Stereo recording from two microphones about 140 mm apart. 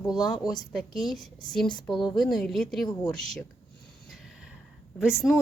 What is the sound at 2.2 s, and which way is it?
Speech, centre (ahead or behind).